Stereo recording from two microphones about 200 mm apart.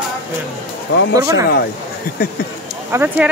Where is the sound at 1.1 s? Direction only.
15° right (ahead or behind).